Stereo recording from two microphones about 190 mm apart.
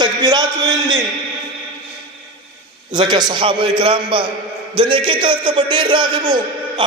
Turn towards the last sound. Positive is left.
turn(degrees=-25)  # may be behind; listen again after turning